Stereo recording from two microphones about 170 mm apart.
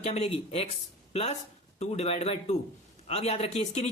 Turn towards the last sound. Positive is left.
turn(degrees=35)  # may be behind; listen again after turning